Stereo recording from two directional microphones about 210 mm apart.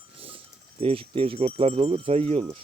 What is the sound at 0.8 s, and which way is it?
Speech, 25° right (ahead or behind).